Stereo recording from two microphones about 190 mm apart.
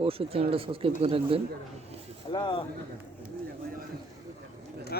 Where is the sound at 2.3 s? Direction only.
25° left (ahead or behind).